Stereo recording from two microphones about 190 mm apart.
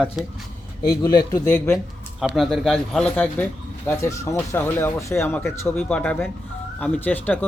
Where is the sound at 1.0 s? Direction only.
20° left (ahead or behind).